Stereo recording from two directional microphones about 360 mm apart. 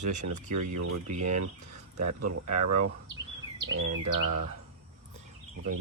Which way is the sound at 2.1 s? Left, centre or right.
Right.